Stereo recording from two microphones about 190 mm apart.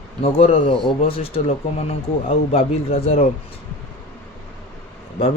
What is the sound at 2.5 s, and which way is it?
Speech, 30° left (ahead or behind).